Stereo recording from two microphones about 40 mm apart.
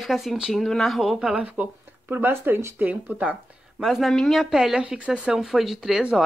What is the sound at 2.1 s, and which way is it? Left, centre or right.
Speech, right.